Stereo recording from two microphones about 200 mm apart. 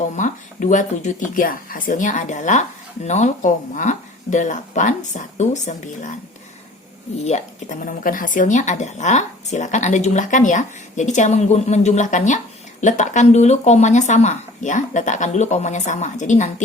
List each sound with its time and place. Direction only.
0.2 s speech: 40° left (ahead or behind)
7.2 s speech: 35° left (ahead or behind)